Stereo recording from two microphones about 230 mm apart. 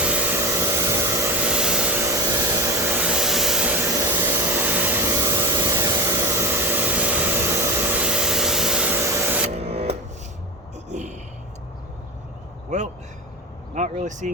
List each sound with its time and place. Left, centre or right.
0.0 s hair dryer: centre
2.8 s vacuum cleaner: centre
9.6 s music: right
10.8 s a sound: right
12.7 s a sound: right
13.7 s vehicle: right